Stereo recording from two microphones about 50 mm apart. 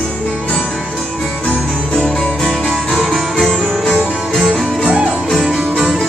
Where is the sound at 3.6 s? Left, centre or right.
Centre.